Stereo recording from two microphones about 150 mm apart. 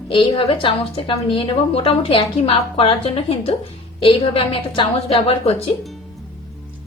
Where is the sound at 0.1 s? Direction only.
35° left (ahead or behind).